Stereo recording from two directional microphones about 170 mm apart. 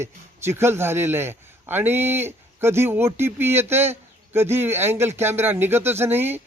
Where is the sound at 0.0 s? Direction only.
15° right (ahead or behind).